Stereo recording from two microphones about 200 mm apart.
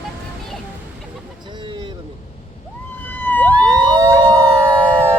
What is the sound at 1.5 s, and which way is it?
Vehicle, 25° right (ahead or behind).